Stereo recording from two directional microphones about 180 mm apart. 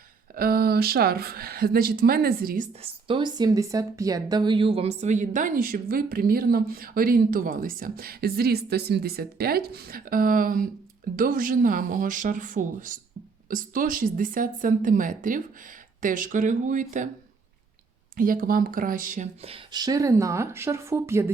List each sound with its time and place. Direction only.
0.3 s a woman's voice: 55° right (ahead or behind)
2.8 s speech: 25° right (ahead or behind); by 17.1 s 45° right (ahead or behind)
18.2 s speech: 50° right (ahead or behind); by 21.2 s 15° right (ahead or behind)